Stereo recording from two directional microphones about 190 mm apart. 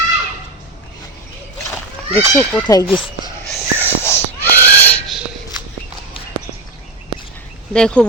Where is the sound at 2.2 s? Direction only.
5° left (ahead or behind).